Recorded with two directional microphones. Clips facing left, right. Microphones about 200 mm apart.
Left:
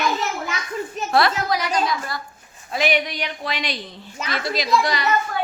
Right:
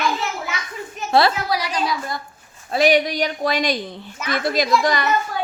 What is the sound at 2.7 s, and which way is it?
A child's voice, 35° right (ahead or behind).